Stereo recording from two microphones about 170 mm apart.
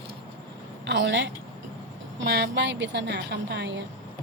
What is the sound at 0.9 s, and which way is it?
A woman's voice, 90° right.